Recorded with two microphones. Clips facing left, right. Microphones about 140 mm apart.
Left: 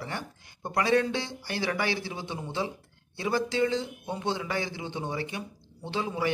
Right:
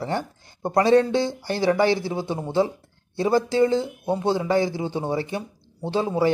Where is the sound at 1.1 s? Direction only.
45° right (ahead or behind).